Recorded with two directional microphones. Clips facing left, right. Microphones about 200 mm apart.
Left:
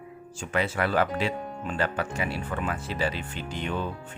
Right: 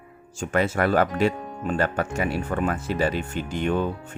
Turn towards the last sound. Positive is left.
turn(degrees=-50)  # may be behind; listen again after turning